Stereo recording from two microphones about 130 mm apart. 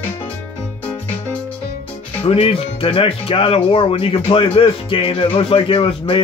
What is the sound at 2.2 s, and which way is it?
Speech, 45° left (ahead or behind).